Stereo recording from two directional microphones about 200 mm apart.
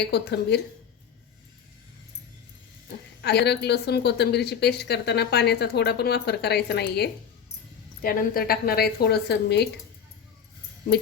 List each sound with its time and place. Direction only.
0.1 s a woman's voice: 55° left (ahead or behind)
3.2 s a woman's voice: 55° left (ahead or behind)